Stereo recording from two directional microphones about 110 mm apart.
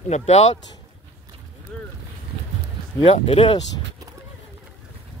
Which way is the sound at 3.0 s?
65° left (ahead or behind).